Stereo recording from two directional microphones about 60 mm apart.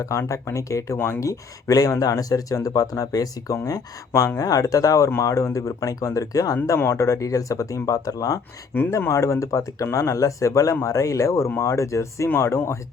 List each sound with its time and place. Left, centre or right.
0.0 s speech: left
4.4 s speech: left
6.7 s speech: left
8.9 s speech: left
9.8 s speech: left